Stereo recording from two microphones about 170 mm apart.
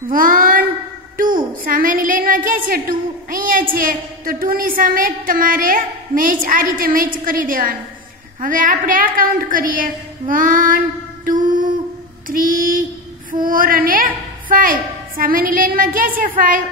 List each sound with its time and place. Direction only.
0.1 s child singing: 55° right (ahead or behind)
1.1 s a woman's voice: 55° right (ahead or behind)
11.2 s mantra: 50° right (ahead or behind)
12.3 s a woman's voice: 55° right (ahead or behind)
13.3 s female singing: 55° right (ahead or behind)
14.5 s a woman's voice: 55° right (ahead or behind)
16.2 s female singing: 55° right (ahead or behind)